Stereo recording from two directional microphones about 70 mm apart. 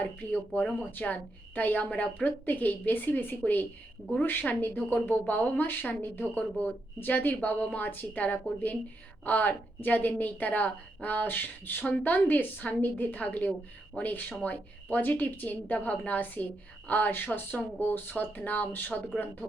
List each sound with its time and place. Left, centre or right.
0.0 s a woman's voice: left